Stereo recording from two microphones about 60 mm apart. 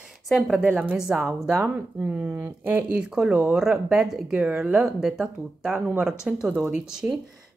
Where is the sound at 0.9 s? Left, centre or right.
Centre.